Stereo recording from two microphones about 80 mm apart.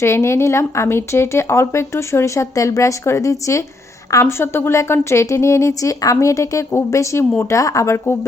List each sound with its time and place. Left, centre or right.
0.0 s a woman's voice: left